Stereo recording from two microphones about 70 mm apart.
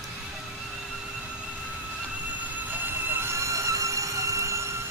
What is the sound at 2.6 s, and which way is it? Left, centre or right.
Music, right.